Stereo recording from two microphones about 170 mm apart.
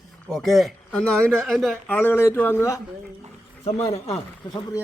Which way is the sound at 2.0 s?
10° left (ahead or behind).